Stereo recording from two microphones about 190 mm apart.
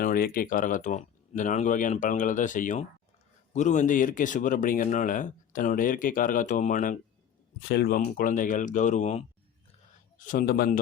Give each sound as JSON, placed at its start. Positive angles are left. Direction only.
{"t": 0.0, "sound": "speech", "side_deg": 50}
{"t": 7.7, "sound": "speech", "side_deg": 55}